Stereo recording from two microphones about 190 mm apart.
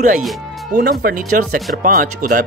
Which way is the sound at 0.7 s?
50° right (ahead or behind).